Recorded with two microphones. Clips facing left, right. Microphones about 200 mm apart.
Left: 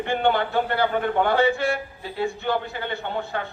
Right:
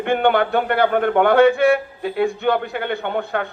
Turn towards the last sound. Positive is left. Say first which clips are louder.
# right 6 dB
turn(degrees=-60)  # may be behind; listen again after turning